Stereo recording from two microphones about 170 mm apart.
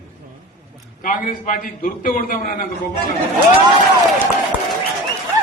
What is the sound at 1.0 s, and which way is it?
A man's voice, 50° left (ahead or behind).